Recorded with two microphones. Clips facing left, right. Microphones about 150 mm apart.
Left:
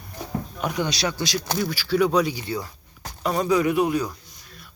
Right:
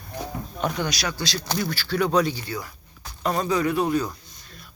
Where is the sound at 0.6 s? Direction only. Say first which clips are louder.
Even; 10° left (ahead or behind).